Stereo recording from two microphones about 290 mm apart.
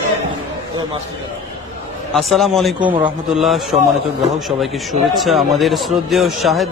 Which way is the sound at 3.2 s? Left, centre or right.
Centre.